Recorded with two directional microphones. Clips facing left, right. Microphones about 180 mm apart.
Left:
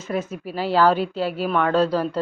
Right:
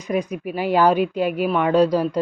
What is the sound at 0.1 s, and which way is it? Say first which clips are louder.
Speech: right 3 dB; 15° right (ahead or behind).